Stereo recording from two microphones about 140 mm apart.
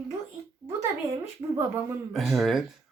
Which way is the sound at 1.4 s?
25° right (ahead or behind).